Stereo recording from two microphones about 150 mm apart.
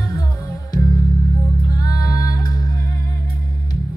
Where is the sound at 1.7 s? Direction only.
25° left (ahead or behind).